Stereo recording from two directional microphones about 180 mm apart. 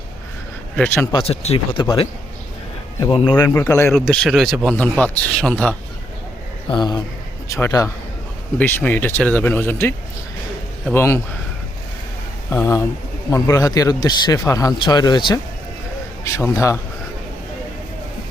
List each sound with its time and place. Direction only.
1.1 s a man's voice: 35° left (ahead or behind); by 3.9 s 15° left (ahead or behind)
3.9 s speech: 5° left (ahead or behind)
6.7 s a man's voice: 25° left (ahead or behind)
12.5 s a man's voice: 15° left (ahead or behind)